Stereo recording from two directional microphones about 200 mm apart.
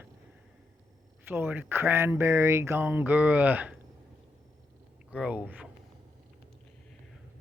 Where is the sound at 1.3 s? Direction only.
10° right (ahead or behind).